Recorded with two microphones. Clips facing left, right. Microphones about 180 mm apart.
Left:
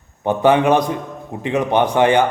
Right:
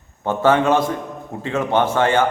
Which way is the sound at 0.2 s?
15° left (ahead or behind).